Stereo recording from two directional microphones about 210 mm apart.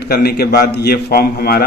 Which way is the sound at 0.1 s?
50° left (ahead or behind).